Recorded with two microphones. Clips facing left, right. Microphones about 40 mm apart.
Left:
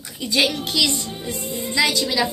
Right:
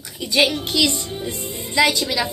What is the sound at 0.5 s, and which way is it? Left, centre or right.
Speech, right.